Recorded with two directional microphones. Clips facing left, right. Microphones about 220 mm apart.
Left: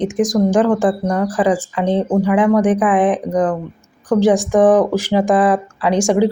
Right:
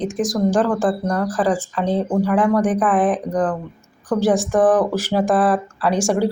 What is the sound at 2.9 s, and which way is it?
Speech, centre (ahead or behind).